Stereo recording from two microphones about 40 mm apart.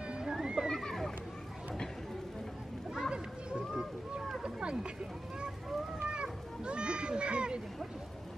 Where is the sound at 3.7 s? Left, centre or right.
Centre.